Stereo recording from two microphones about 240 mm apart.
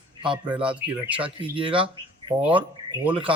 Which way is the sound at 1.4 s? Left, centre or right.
Right.